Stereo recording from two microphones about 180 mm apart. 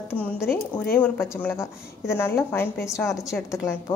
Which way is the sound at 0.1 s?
10° left (ahead or behind).